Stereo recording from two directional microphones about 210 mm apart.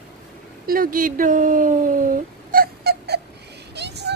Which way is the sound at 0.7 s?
40° right (ahead or behind).